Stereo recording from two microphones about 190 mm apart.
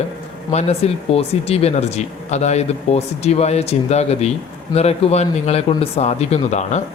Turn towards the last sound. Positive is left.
turn(degrees=35)  # may be behind; listen again after turning